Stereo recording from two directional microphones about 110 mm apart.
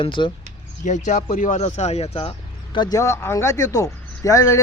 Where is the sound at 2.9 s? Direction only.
25° left (ahead or behind).